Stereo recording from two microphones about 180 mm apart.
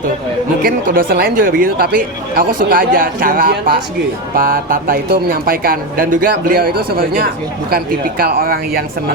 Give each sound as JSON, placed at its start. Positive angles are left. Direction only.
{"t": 0.6, "sound": "speech", "side_deg": -55}